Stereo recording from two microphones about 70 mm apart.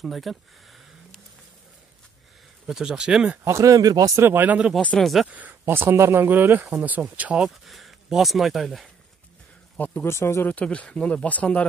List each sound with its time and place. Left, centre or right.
0.0 s a sound: centre
2.6 s speech: centre
3.4 s speech: right
4.2 s speech: right
6.2 s speech: right
7.4 s speech: centre
9.8 s speech: left
10.0 s speech: left
10.5 s speech: centre